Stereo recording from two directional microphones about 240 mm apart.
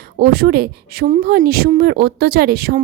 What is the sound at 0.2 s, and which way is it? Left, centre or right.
Speech, right.